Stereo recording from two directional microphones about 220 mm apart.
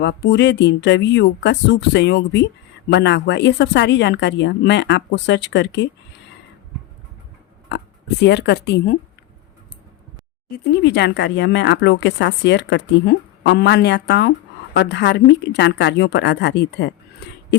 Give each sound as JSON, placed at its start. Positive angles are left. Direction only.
{"t": 0.0, "sound": "speech", "side_deg": 50}
{"t": 8.2, "sound": "speech", "side_deg": 50}
{"t": 10.5, "sound": "speech", "side_deg": 50}